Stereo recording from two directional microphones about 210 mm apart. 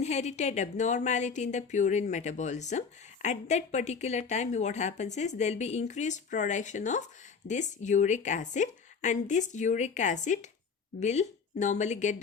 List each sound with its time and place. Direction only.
0.0 s speech: 30° left (ahead or behind)